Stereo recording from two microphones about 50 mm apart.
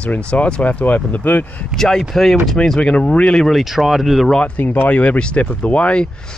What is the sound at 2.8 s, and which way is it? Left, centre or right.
Speech, left.